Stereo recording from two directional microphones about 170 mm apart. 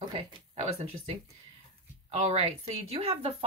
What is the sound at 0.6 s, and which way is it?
Speech, 35° right (ahead or behind).